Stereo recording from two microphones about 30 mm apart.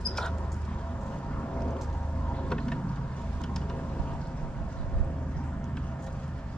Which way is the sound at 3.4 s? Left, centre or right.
Left.